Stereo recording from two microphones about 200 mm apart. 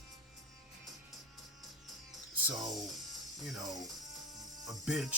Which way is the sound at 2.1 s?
Centre (ahead or behind).